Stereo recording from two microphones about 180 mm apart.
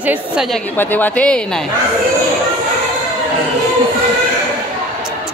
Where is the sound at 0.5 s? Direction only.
10° left (ahead or behind).